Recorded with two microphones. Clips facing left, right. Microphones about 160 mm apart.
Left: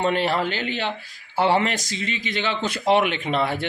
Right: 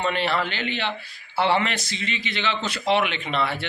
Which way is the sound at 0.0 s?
40° left (ahead or behind).